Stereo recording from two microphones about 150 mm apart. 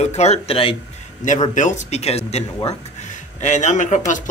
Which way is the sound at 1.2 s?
55° left (ahead or behind).